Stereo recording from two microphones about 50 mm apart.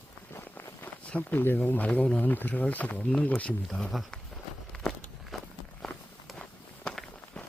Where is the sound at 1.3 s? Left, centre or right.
Left.